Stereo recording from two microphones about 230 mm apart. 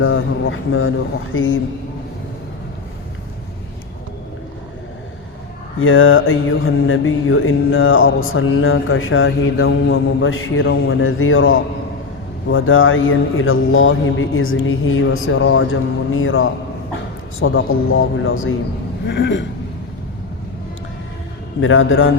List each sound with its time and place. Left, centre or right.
0.0 s mantra: left
5.8 s mantra: left
19.0 s a sound: left
21.6 s mantra: left